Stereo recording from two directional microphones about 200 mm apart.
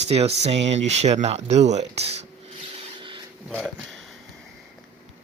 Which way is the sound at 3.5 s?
Centre (ahead or behind).